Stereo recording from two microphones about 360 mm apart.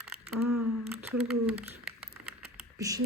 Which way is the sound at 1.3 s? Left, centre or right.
Centre.